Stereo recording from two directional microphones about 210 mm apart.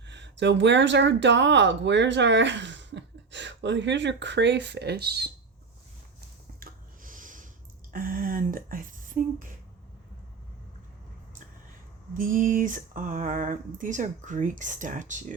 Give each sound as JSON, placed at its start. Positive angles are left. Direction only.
{"t": 0.0, "sound": "speech", "side_deg": -55}
{"t": 6.6, "sound": "a sound", "side_deg": -40}
{"t": 7.9, "sound": "speech", "side_deg": -40}
{"t": 12.1, "sound": "speech", "side_deg": -40}